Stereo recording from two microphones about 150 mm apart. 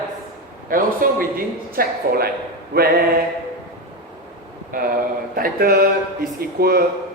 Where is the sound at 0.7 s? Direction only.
70° right (ahead or behind); by 2.9 s 90° right.